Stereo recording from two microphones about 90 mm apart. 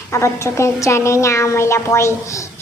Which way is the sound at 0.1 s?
35° left (ahead or behind).